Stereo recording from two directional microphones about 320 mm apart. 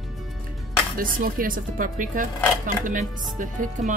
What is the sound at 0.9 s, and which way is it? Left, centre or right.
Speech, right.